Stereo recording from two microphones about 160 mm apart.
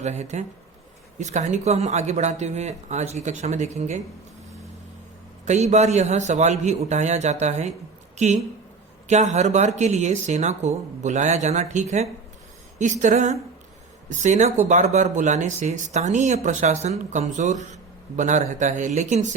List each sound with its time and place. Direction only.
0.0 s speech: 45° right (ahead or behind)
5.5 s speech: 45° right (ahead or behind)